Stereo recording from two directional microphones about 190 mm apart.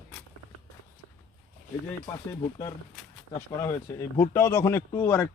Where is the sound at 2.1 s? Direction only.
20° left (ahead or behind).